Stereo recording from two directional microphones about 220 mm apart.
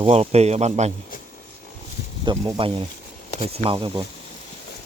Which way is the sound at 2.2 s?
20° right (ahead or behind).